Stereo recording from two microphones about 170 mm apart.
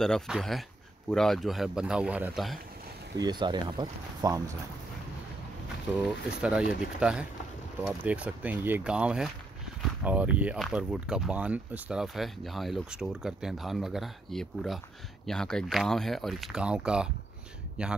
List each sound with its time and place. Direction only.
0.0 s speech: centre (ahead or behind)
3.2 s speech: 25° right (ahead or behind)
6.0 s speech: 5° right (ahead or behind)